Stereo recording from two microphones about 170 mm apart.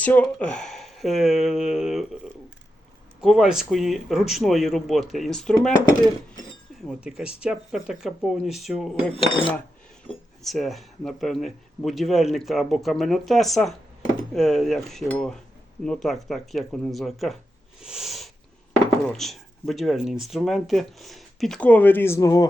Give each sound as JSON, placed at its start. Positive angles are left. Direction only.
{"t": 0.0, "sound": "speech", "side_deg": 10}
{"t": 3.2, "sound": "speech", "side_deg": -5}
{"t": 6.8, "sound": "speech", "side_deg": -5}
{"t": 9.1, "sound": "cutlery", "side_deg": 30}
{"t": 10.4, "sound": "speech", "side_deg": 0}
{"t": 17.7, "sound": "a sound", "side_deg": -5}
{"t": 19.0, "sound": "speech", "side_deg": 0}